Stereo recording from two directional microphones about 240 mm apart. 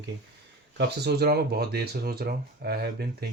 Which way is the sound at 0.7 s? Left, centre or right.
Right.